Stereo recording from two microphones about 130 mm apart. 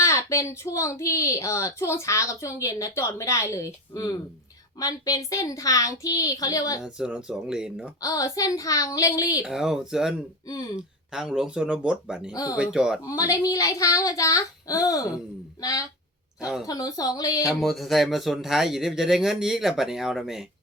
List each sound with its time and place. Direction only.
0.0 s a woman's voice: 25° left (ahead or behind)
6.8 s speech: 5° right (ahead or behind)
8.0 s a woman's voice: 25° left (ahead or behind)
9.4 s speech: 5° right (ahead or behind)
12.3 s a woman's voice: 30° left (ahead or behind)
12.5 s speech: 5° right (ahead or behind)
13.1 s a woman's voice: 25° left (ahead or behind)
17.5 s speech: centre (ahead or behind)